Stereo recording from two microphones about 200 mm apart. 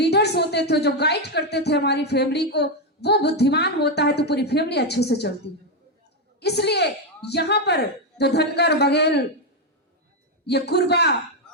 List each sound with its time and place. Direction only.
0.0 s a woman's voice: 55° left (ahead or behind)
6.4 s a woman's voice: 55° left (ahead or behind)
10.4 s a woman's voice: 55° left (ahead or behind)